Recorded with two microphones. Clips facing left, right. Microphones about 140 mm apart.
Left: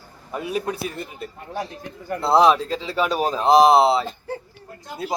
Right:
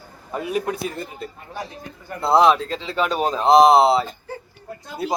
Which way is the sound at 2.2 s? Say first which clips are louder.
Even; centre (ahead or behind).